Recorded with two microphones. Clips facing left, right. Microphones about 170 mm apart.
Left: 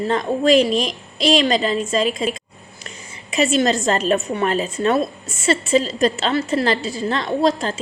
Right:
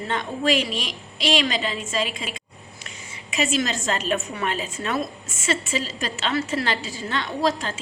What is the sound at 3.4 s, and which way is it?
A woman's voice, 35° left (ahead or behind).